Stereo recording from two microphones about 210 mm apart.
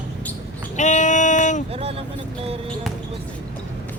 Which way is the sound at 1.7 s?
30° right (ahead or behind).